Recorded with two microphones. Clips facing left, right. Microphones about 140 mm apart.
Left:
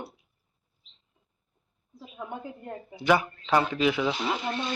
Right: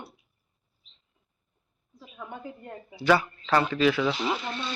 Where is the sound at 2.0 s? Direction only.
20° left (ahead or behind).